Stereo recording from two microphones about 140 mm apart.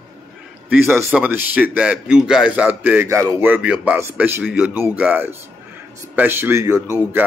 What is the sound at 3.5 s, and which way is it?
A man's voice, 10° right (ahead or behind).